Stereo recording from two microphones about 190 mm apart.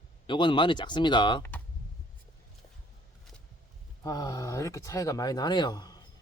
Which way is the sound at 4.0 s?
15° left (ahead or behind).